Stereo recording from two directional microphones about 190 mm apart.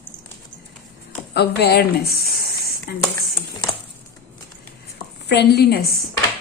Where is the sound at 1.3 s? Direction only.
60° left (ahead or behind).